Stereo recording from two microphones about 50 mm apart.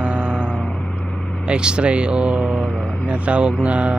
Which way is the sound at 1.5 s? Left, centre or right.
Centre.